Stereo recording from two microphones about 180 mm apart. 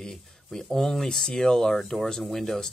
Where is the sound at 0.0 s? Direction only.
5° left (ahead or behind).